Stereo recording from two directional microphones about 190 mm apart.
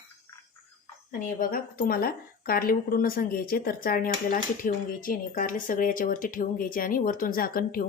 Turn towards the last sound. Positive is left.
turn(degrees=50)  # may be behind; listen again after turning